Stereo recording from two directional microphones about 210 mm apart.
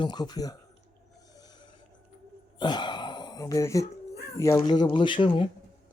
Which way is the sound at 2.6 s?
20° left (ahead or behind).